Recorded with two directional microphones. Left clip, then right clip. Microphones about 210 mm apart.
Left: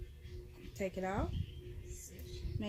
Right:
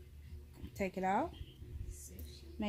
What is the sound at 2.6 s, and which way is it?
Speech, 45° right (ahead or behind).